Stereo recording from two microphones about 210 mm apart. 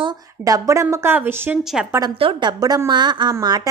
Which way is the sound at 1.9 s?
20° right (ahead or behind).